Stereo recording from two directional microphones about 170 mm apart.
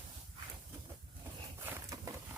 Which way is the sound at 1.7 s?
20° right (ahead or behind).